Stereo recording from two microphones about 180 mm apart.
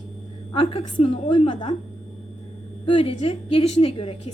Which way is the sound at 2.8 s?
30° left (ahead or behind).